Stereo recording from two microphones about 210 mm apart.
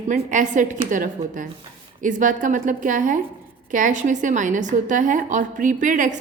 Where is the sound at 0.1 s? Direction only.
40° right (ahead or behind).